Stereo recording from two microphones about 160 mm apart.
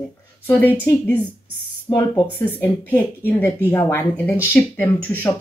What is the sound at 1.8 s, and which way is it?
Speech, 25° left (ahead or behind).